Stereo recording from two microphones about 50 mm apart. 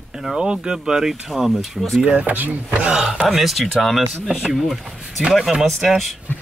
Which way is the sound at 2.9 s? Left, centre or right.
Centre.